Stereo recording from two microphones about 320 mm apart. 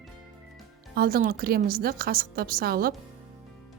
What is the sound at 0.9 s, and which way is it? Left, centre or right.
A woman's voice, right.